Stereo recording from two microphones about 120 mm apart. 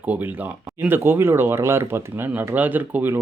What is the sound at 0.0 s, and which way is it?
Speech, 15° right (ahead or behind).